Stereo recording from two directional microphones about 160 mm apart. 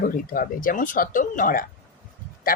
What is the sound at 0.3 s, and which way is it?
Speech, 60° left (ahead or behind).